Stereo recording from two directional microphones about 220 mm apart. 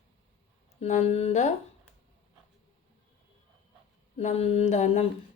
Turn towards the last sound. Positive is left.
turn(degrees=30)  # may be behind; listen again after turning